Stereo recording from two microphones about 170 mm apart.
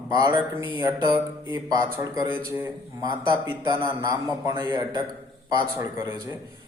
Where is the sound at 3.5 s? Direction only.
25° right (ahead or behind).